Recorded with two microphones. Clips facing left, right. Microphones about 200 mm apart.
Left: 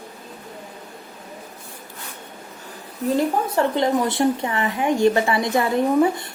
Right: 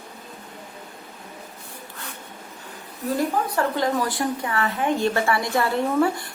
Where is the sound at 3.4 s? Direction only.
25° left (ahead or behind).